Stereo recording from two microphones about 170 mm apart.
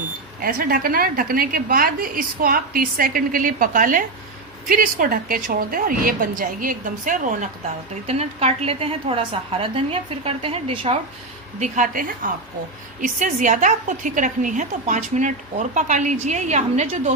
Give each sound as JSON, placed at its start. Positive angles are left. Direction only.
{"t": 0.4, "sound": "a woman's voice", "side_deg": -55}
{"t": 8.0, "sound": "a woman's voice", "side_deg": -40}
{"t": 11.6, "sound": "a woman's voice", "side_deg": -45}